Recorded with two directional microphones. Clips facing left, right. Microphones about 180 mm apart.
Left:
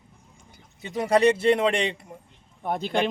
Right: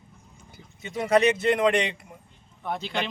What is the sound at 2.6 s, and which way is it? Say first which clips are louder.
Speech: left 5 dB; 50° left (ahead or behind).